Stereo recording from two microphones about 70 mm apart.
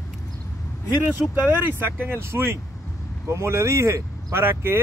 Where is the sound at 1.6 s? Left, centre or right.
Right.